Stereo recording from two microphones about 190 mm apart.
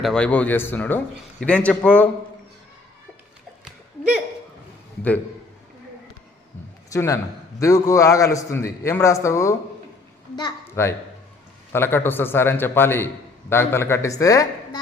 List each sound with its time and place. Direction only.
0.0 s a man's voice: 5° left (ahead or behind)
3.6 s a sound: 5° right (ahead or behind)
6.9 s a man's voice: 15° left (ahead or behind)